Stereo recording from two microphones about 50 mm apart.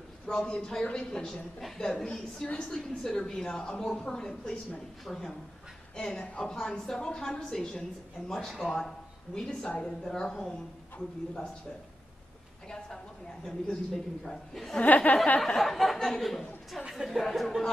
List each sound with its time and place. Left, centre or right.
0.3 s a woman's voice: centre
5.0 s speech: centre
6.1 s a woman's voice: left
6.4 s a woman's voice: centre
12.6 s a sound: centre
14.2 s a woman's voice: centre
14.8 s speech: left
15.4 s speech: centre